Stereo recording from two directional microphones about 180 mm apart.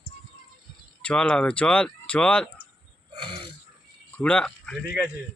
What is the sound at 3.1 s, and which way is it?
Throat clearing, 30° right (ahead or behind).